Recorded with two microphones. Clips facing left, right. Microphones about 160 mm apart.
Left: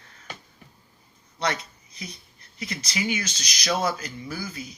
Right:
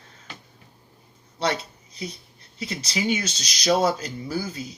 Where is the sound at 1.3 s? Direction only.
30° right (ahead or behind).